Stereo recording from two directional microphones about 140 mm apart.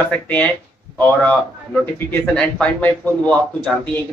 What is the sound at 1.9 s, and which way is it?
Speech, 5° left (ahead or behind).